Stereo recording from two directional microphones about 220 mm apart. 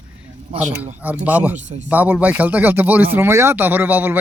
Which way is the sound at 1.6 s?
30° right (ahead or behind).